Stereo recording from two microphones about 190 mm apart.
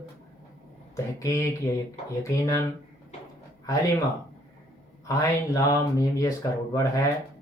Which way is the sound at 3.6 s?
15° left (ahead or behind).